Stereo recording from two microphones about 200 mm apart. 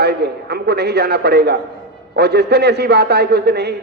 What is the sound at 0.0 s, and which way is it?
A man's voice, 55° right (ahead or behind).